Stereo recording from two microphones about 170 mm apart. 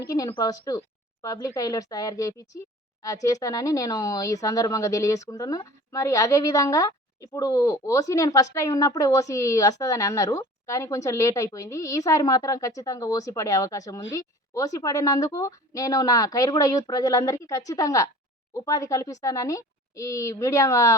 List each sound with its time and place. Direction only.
0.0 s speech: 20° left (ahead or behind)